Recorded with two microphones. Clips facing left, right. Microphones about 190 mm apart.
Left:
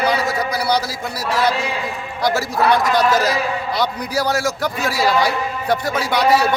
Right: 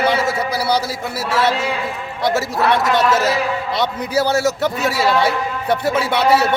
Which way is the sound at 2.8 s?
Centre (ahead or behind).